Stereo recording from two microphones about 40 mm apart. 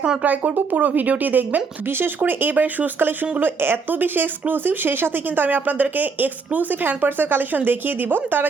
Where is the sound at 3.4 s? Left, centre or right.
Right.